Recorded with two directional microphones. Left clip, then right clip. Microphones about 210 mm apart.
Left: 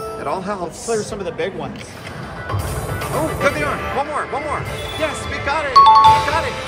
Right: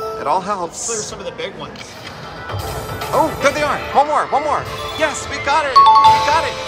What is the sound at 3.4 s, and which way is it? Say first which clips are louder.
Speech: right 2 dB; 15° right (ahead or behind).